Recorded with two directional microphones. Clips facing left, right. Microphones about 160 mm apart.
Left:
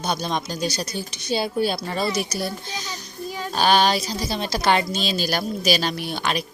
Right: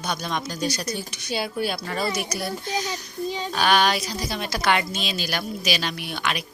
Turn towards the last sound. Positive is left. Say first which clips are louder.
# left 3 dB
turn(degrees=35)  # may be behind; listen again after turning